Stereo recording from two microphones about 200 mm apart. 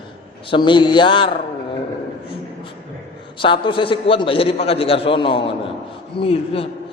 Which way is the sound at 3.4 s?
25° left (ahead or behind).